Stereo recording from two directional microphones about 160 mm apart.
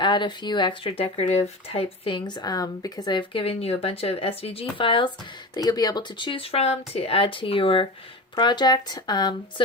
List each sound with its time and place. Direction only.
0.0 s speech: 30° left (ahead or behind)